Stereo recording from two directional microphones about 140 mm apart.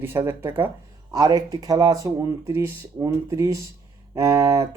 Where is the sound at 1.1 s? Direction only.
25° right (ahead or behind).